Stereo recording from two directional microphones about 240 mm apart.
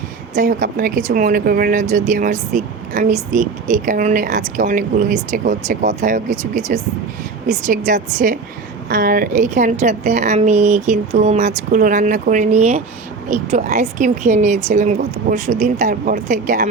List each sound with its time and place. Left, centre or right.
0.3 s a woman's voice: right